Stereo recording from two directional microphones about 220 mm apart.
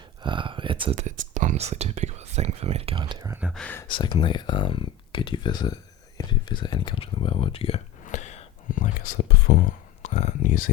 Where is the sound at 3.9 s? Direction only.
20° left (ahead or behind).